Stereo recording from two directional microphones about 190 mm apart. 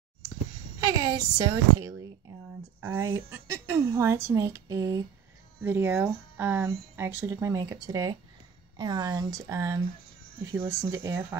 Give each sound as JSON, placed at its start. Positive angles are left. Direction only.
{"t": 0.8, "sound": "speech", "side_deg": -20}